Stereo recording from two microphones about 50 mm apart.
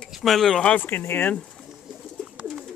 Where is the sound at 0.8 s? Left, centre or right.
Left.